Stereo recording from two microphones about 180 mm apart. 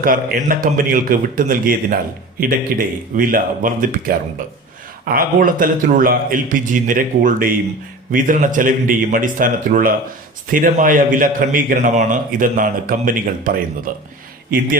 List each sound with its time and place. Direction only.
0.0 s a man's voice: 50° right (ahead or behind)